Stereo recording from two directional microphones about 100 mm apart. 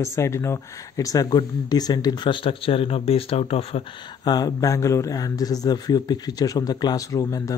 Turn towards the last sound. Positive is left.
turn(degrees=35)  # may be behind; listen again after turning